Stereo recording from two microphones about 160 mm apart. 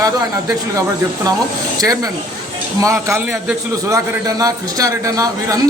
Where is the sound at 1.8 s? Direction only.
20° right (ahead or behind).